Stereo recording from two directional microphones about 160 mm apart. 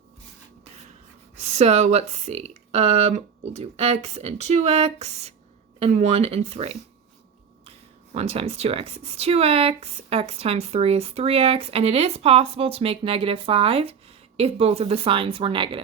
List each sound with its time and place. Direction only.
1.4 s speech: 45° right (ahead or behind)
8.1 s speech: 40° right (ahead or behind)